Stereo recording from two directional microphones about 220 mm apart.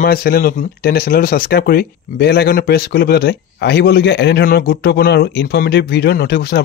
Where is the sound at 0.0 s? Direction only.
40° left (ahead or behind).